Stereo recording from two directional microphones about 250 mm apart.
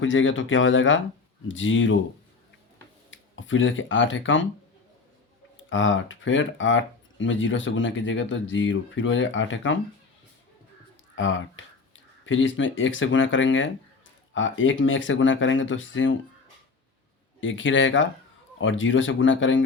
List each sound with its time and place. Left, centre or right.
0.0 s speech: left
3.1 s speech: left
5.6 s speech: left
11.1 s speech: left
17.4 s speech: left